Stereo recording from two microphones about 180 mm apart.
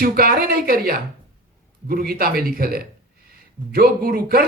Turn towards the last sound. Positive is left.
turn(degrees=-55)  # may be behind; listen again after turning